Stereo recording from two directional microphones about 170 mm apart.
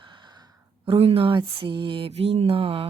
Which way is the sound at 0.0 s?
25° right (ahead or behind).